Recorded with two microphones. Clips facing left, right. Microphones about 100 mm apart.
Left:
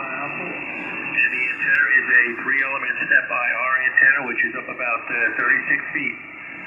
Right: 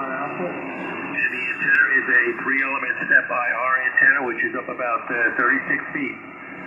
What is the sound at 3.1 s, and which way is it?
Speech, 20° right (ahead or behind).